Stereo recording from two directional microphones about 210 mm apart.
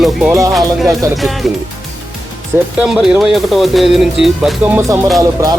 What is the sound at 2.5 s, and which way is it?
Speech, 10° right (ahead or behind).